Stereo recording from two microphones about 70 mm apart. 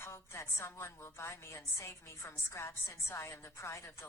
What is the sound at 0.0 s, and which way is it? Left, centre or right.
A woman's voice, left.